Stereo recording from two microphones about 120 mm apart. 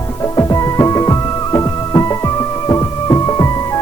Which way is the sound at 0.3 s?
30° left (ahead or behind).